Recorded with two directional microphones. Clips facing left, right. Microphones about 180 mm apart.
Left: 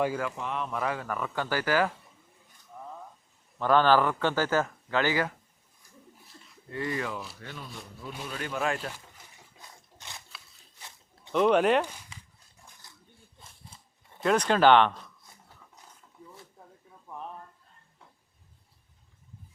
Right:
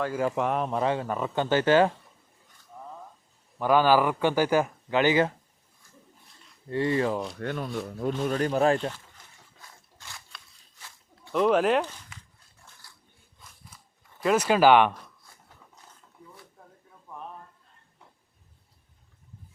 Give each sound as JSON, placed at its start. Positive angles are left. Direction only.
{"t": 0.3, "sound": "speech", "side_deg": -50}
{"t": 0.7, "sound": "speech", "side_deg": -30}
{"t": 3.6, "sound": "speech", "side_deg": -10}
{"t": 6.7, "sound": "speech", "side_deg": -30}
{"t": 7.3, "sound": "rub", "side_deg": -60}
{"t": 8.2, "sound": "speech", "side_deg": -40}
{"t": 9.6, "sound": "a sound", "side_deg": 20}
{"t": 11.3, "sound": "speech", "side_deg": 0}
{"t": 12.8, "sound": "a sound", "side_deg": 20}
{"t": 14.2, "sound": "speech", "side_deg": -5}
{"t": 15.3, "sound": "dog", "side_deg": 20}